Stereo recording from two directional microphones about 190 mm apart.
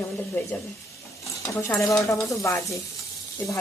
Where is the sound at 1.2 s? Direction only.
15° left (ahead or behind).